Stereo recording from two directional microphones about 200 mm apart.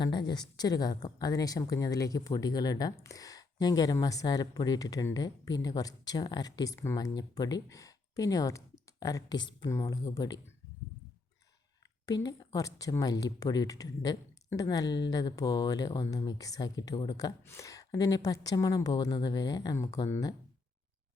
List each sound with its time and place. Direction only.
0.0 s speech: 20° left (ahead or behind)
12.0 s speech: 20° left (ahead or behind)